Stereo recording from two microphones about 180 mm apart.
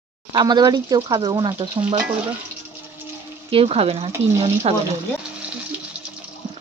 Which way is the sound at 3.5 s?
30° right (ahead or behind).